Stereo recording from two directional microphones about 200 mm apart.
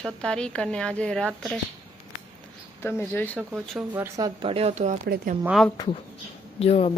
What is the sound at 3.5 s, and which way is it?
Speech, 10° right (ahead or behind).